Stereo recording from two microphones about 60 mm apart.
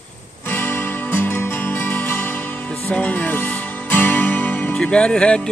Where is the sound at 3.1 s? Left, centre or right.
Left.